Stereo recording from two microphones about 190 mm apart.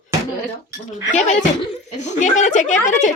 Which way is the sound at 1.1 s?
40° left (ahead or behind).